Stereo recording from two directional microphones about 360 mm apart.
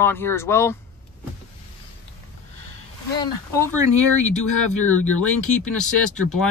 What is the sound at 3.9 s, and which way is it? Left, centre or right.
Speech, left.